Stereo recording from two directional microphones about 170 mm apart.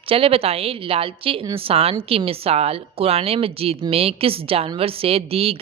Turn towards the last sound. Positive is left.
turn(degrees=-35)  # may be behind; listen again after turning